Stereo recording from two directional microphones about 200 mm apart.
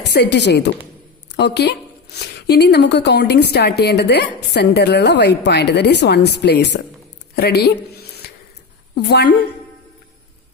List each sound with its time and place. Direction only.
0.1 s a woman's voice: 60° left (ahead or behind)